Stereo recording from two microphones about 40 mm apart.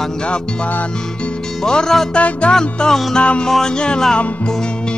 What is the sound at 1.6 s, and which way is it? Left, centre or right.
Music, centre.